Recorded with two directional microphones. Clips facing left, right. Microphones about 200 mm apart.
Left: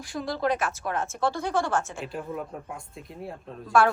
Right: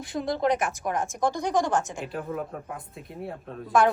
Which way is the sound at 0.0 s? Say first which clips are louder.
Right 2 dB; 20° right (ahead or behind).